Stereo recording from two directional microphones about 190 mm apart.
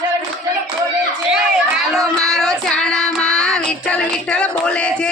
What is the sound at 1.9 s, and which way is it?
Child singing, centre (ahead or behind).